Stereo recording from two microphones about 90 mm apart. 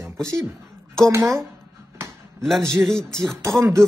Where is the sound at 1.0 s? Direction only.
35° right (ahead or behind).